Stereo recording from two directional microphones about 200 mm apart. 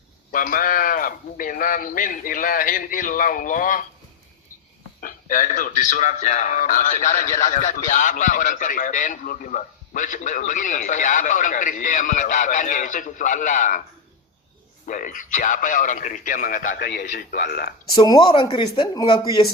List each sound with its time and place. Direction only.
0.3 s a man's voice: 45° left (ahead or behind)
4.9 s a man's voice: 45° left (ahead or behind)
14.8 s a man's voice: 40° left (ahead or behind)
17.9 s speech: 20° left (ahead or behind)